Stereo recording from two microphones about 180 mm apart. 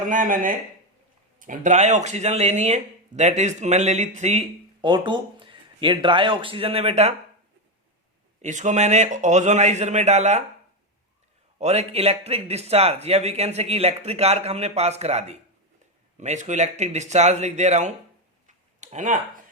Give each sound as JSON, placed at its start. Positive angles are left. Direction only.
{"t": 0.1, "sound": "speech", "side_deg": -50}
{"t": 8.4, "sound": "speech", "side_deg": -40}
{"t": 11.6, "sound": "speech", "side_deg": -35}
{"t": 18.4, "sound": "a sound", "side_deg": -40}